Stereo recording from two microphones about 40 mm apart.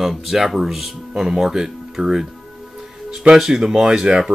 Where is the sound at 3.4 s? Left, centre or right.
Centre.